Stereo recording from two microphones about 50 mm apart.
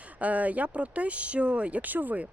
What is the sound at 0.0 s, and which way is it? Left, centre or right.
Speech, right.